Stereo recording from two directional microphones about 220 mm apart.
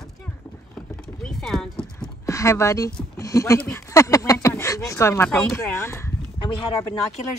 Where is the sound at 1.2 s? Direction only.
5° left (ahead or behind).